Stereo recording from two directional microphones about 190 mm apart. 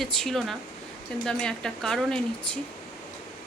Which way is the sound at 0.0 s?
Centre (ahead or behind).